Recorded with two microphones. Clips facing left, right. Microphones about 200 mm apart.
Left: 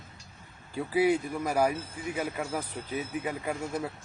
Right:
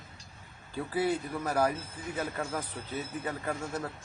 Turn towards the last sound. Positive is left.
turn(degrees=10)  # may be behind; listen again after turning